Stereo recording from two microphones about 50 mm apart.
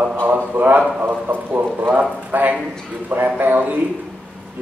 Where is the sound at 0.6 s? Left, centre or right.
Right.